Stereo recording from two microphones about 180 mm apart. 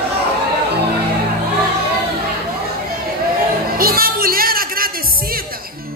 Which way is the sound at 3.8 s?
55° right (ahead or behind).